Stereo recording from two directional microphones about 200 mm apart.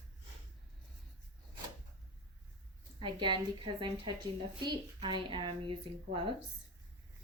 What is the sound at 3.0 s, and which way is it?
Speech, 25° right (ahead or behind).